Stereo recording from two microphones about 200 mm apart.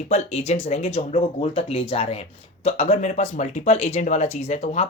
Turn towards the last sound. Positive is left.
turn(degrees=30)  # may be behind; listen again after turning